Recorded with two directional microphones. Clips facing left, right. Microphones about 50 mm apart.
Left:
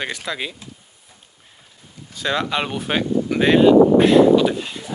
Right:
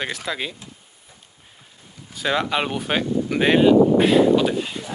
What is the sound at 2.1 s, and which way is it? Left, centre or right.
Speech, centre.